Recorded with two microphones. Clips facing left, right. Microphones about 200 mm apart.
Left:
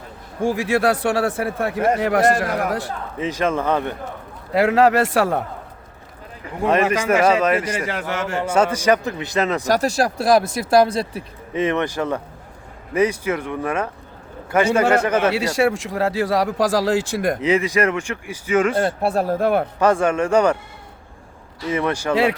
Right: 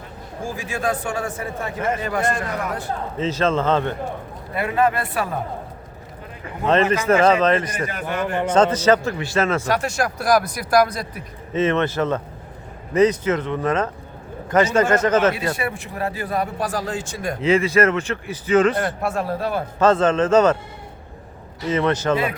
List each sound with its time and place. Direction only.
0.4 s a man's voice: 75° left (ahead or behind)
3.2 s speech: 15° left (ahead or behind)
4.5 s speech: 90° left
6.9 s speech: 10° left (ahead or behind)
7.8 s speech: 90° left
8.4 s speech: 10° left (ahead or behind)
9.6 s speech: 35° left (ahead or behind)
11.5 s speech: 15° left (ahead or behind)
15.3 s speech: 90° left; by 17.3 s 70° left (ahead or behind)
17.4 s speech: 15° left (ahead or behind)
18.8 s speech: 30° left (ahead or behind); by 19.6 s 50° left (ahead or behind)
19.8 s speech: 10° left (ahead or behind)
21.7 s speech: 15° left (ahead or behind)
22.1 s speech: 90° left